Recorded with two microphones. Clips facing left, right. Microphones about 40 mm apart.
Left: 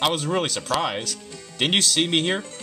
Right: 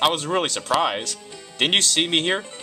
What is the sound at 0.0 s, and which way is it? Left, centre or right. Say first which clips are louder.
Speech: right 2 dB; centre.